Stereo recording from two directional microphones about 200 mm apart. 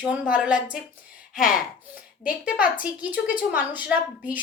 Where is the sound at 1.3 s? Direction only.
40° left (ahead or behind).